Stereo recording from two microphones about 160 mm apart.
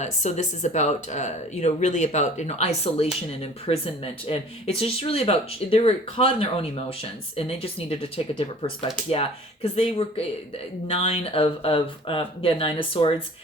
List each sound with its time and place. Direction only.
0.0 s speech: 45° left (ahead or behind)